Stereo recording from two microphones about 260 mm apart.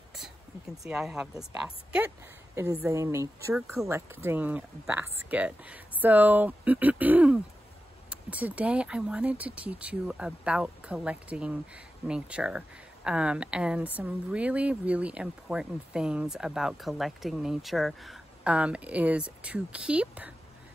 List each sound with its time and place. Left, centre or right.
0.8 s speech: centre